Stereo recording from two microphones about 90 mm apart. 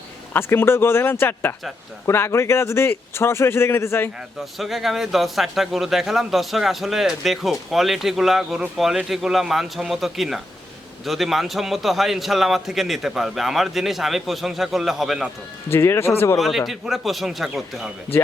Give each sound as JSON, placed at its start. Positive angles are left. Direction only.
{"t": 0.3, "sound": "a man's voice", "side_deg": 25}
{"t": 4.5, "sound": "a man's voice", "side_deg": 0}
{"t": 15.7, "sound": "a man's voice", "side_deg": 30}
{"t": 16.4, "sound": "a man's voice", "side_deg": 0}